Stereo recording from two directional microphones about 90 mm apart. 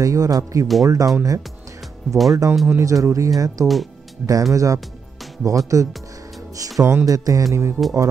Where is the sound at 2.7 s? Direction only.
35° right (ahead or behind).